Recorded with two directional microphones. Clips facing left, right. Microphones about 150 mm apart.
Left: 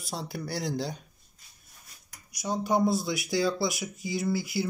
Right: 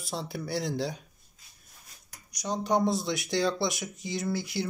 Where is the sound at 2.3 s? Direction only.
10° left (ahead or behind).